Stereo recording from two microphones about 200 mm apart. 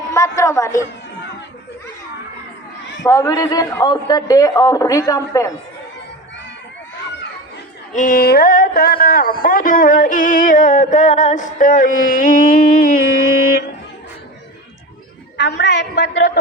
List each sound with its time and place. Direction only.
0.1 s a man's voice: 15° left (ahead or behind)
3.0 s a man's voice: 15° left (ahead or behind)
7.9 s a sound: 40° left (ahead or behind)
15.4 s a man's voice: 60° left (ahead or behind)